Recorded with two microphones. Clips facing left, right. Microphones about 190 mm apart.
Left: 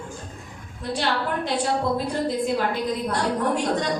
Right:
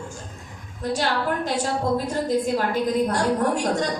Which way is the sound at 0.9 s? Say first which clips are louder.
Right 1 dB; 45° right (ahead or behind).